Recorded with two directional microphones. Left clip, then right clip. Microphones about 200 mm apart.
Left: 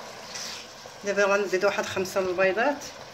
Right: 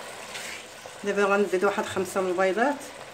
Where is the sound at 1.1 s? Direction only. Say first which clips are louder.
Even; 45° right (ahead or behind).